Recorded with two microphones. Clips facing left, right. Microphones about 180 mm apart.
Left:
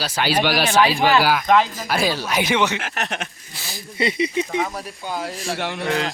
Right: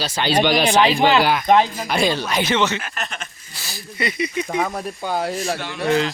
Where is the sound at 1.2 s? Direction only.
5° left (ahead or behind).